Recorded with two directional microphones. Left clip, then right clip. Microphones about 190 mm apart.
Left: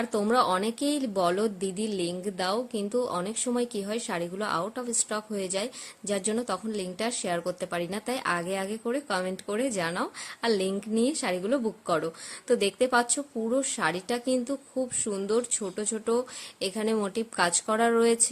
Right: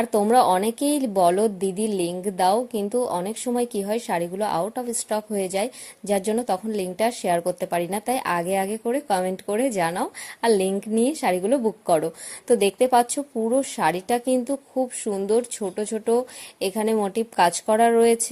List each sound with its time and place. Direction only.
0.0 s a woman's voice: 15° right (ahead or behind)